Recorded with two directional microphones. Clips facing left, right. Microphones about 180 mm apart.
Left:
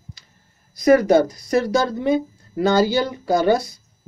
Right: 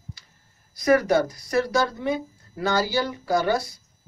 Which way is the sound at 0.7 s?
20° left (ahead or behind).